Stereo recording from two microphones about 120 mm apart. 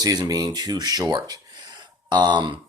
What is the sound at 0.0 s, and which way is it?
Speech, 30° right (ahead or behind).